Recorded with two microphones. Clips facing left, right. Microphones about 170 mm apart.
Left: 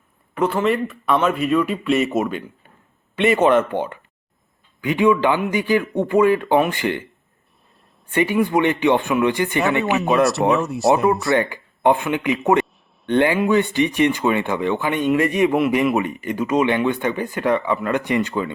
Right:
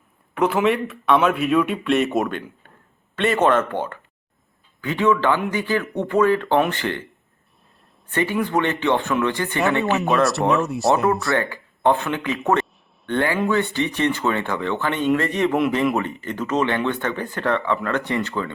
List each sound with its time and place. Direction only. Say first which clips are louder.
0.3 s speech: even; centre (ahead or behind)
8.1 s speech: left 3 dB; 15° left (ahead or behind)
10.5 s speech: left 2 dB; centre (ahead or behind)
11.3 s speech: left 3 dB; 15° left (ahead or behind)